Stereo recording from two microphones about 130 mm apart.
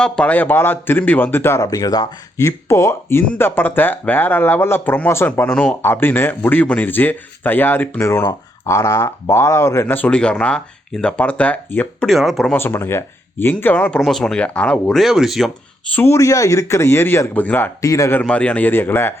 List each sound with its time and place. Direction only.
0.0 s speech: 10° left (ahead or behind)
12.0 s speech: centre (ahead or behind)
12.5 s speech: 15° left (ahead or behind)
14.0 s speech: centre (ahead or behind)
16.0 s speech: 20° left (ahead or behind)
17.8 s speech: 25° left (ahead or behind)
18.2 s speech: 10° left (ahead or behind)